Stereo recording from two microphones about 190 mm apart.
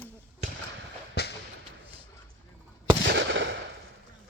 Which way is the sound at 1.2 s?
60° left (ahead or behind).